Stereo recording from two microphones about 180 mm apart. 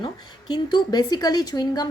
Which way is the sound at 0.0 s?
25° left (ahead or behind).